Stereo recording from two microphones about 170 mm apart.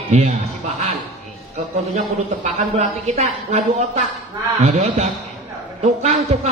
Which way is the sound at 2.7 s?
40° right (ahead or behind).